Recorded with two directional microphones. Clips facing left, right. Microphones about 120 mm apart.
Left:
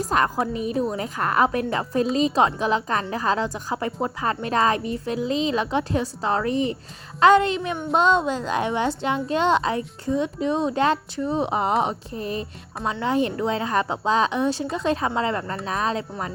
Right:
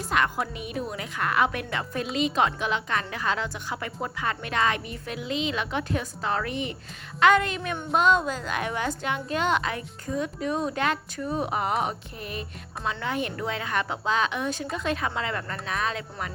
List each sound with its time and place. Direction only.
0.0 s a woman's voice: 35° left (ahead or behind)